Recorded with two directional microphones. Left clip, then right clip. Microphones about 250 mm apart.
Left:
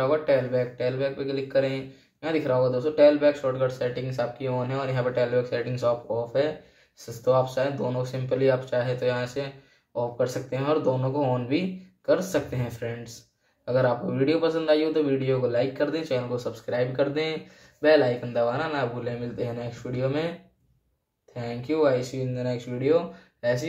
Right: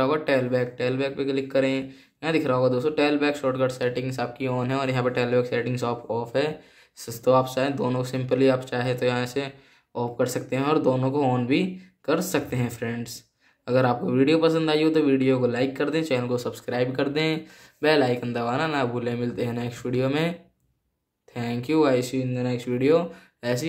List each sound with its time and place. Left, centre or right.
0.0 s a man's voice: right
21.4 s a man's voice: right